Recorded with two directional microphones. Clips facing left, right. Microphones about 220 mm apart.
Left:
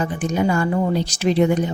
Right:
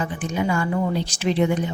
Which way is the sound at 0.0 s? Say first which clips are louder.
Left 4 dB; 40° left (ahead or behind).